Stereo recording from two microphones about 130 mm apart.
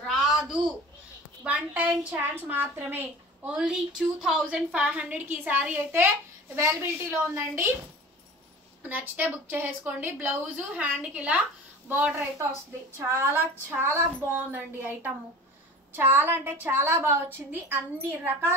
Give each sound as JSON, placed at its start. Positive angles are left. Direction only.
{"t": 0.0, "sound": "a sound", "side_deg": 0}
{"t": 1.4, "sound": "a woman's voice", "side_deg": -10}
{"t": 8.8, "sound": "a woman's voice", "side_deg": -10}
{"t": 13.0, "sound": "a woman's voice", "side_deg": -20}